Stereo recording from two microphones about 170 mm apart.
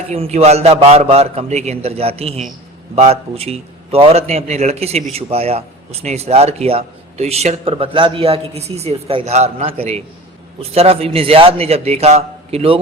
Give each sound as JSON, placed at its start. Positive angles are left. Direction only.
{"t": 0.1, "sound": "speech", "side_deg": -40}